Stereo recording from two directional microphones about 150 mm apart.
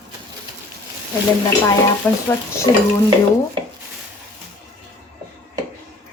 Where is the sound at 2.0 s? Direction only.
10° left (ahead or behind).